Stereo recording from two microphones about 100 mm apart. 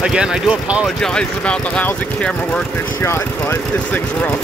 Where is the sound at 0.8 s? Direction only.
5° left (ahead or behind).